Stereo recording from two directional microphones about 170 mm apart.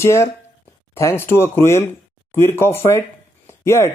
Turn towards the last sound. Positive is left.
turn(degrees=15)  # may be behind; listen again after turning